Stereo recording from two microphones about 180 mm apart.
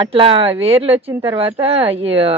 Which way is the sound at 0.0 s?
30° right (ahead or behind).